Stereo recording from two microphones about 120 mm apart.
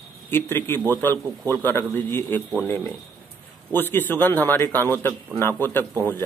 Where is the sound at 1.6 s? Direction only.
20° left (ahead or behind).